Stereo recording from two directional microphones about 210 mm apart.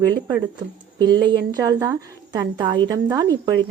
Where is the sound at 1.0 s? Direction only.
20° right (ahead or behind).